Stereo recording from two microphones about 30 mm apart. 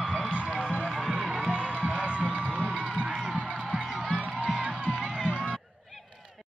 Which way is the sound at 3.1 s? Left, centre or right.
Centre.